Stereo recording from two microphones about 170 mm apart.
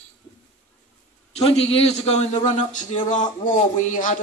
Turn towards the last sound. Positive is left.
turn(degrees=45)  # may be behind; listen again after turning